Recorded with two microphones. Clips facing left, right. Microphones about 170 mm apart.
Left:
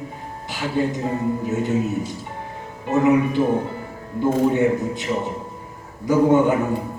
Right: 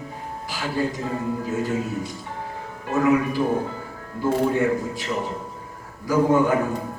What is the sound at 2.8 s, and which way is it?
Speech, 20° left (ahead or behind).